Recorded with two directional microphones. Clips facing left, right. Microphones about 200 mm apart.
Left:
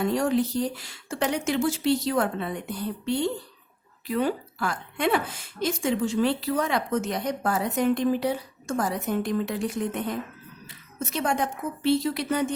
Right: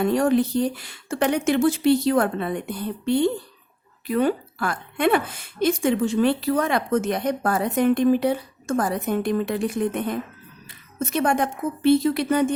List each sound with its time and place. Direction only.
0.0 s a woman's voice: 55° right (ahead or behind)